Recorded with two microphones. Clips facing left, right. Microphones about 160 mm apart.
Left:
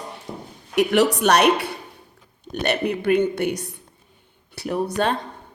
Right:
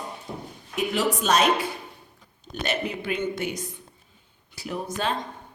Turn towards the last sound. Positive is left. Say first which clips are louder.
# left 7 dB
turn(degrees=65)  # may be behind; listen again after turning